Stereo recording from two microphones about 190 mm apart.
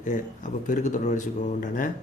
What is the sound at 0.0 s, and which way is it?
Speech, 40° left (ahead or behind).